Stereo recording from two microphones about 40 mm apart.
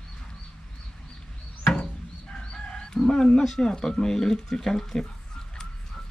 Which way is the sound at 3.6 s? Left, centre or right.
Centre.